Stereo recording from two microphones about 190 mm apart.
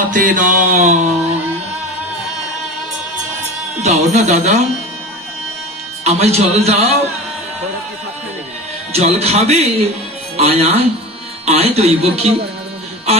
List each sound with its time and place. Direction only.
0.1 s music: 45° right (ahead or behind)
3.8 s speech: 35° right (ahead or behind)
6.0 s speech: 35° right (ahead or behind)
8.9 s speech: 35° right (ahead or behind)